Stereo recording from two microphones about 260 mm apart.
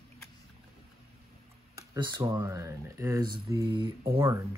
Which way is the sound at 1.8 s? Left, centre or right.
Centre.